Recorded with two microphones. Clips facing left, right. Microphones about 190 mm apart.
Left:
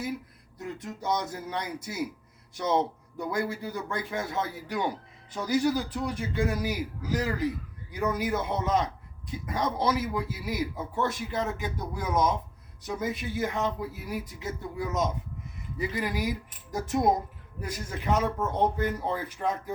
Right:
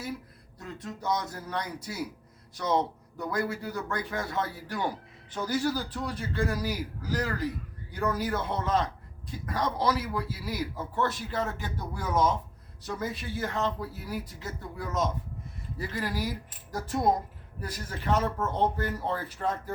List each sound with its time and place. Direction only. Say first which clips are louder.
0.6 s a man's voice: left 2 dB; 20° left (ahead or behind)